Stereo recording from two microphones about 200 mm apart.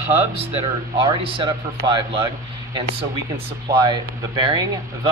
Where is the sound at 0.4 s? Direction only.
30° right (ahead or behind).